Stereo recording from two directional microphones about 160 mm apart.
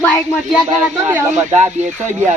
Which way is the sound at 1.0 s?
15° right (ahead or behind).